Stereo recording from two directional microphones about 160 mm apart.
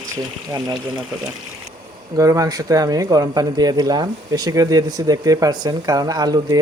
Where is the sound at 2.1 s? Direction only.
20° right (ahead or behind).